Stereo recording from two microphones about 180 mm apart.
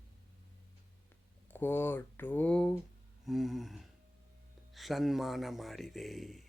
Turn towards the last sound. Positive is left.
turn(degrees=0)  # may be behind; listen again after turning